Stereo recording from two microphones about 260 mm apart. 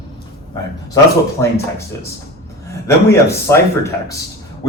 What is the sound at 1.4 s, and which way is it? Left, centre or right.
Speech, centre.